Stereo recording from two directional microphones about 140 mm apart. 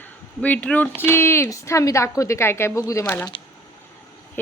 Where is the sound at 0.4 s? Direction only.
10° left (ahead or behind).